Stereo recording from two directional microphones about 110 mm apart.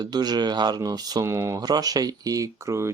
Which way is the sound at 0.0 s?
40° right (ahead or behind).